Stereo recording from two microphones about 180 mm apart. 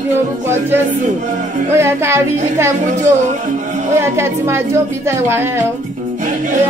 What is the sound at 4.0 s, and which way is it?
Speech, 15° right (ahead or behind).